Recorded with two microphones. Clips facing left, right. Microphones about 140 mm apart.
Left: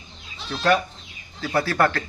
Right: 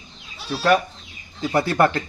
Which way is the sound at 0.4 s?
10° right (ahead or behind).